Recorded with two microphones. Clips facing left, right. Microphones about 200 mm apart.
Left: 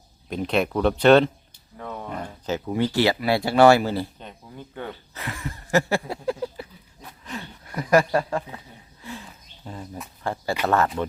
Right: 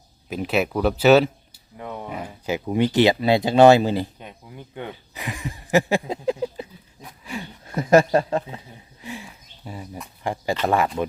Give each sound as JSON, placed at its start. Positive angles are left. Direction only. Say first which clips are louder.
{"t": 0.3, "sound": "speech", "louder": "even", "side_deg": -5}
{"t": 2.6, "sound": "speech", "louder": "right 4 dB", "side_deg": -20}
{"t": 7.3, "sound": "a sound", "louder": "right 3 dB", "side_deg": -10}
{"t": 7.6, "sound": "speech", "louder": "right 4 dB", "side_deg": -25}
{"t": 8.3, "sound": "a sound", "louder": "right 3 dB", "side_deg": -20}
{"t": 10.3, "sound": "speech", "louder": "right 1 dB", "side_deg": -15}